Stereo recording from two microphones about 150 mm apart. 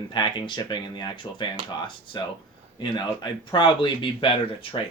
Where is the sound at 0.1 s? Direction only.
30° left (ahead or behind).